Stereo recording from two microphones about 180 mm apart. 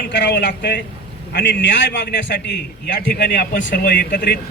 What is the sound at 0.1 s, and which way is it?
A man's voice, 75° left (ahead or behind).